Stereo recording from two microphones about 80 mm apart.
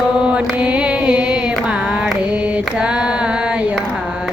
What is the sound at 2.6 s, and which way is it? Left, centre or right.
Mantra, centre.